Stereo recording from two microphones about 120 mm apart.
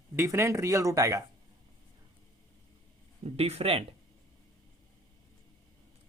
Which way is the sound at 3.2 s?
60° right (ahead or behind).